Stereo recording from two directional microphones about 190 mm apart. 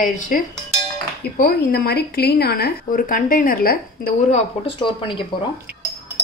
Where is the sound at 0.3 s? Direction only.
45° left (ahead or behind).